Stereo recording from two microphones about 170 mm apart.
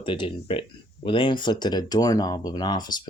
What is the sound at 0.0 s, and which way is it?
Speech, 30° left (ahead or behind).